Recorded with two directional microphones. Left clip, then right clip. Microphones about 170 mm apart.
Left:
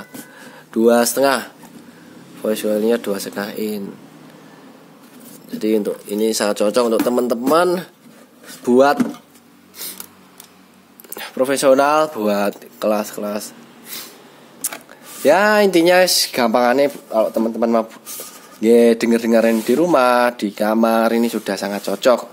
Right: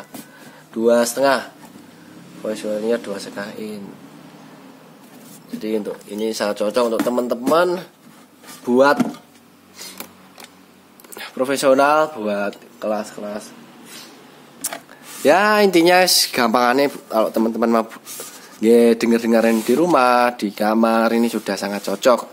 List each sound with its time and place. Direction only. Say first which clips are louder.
0.7 s speech: left 2 dB; 50° left (ahead or behind)
5.6 s speech: left 5 dB; 45° left (ahead or behind)
11.1 s speech: left 3 dB; 25° left (ahead or behind); by 13.4 s 50° left (ahead or behind)
14.6 s single-lens reflex camera: even; 15° left (ahead or behind)
15.2 s speech: left 1 dB; 5° left (ahead or behind)
18.6 s speech: left 1 dB; 10° left (ahead or behind)